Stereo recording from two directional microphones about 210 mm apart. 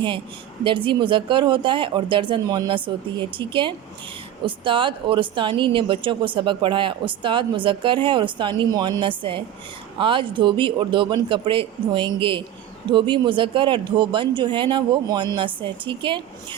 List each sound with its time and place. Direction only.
0.6 s speech: 25° right (ahead or behind)